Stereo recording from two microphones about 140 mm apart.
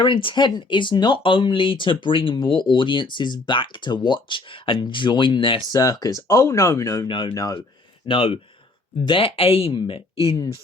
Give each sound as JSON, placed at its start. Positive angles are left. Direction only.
{"t": 0.0, "sound": "speech", "side_deg": 35}
{"t": 5.7, "sound": "speech", "side_deg": 25}
{"t": 8.0, "sound": "speech", "side_deg": 40}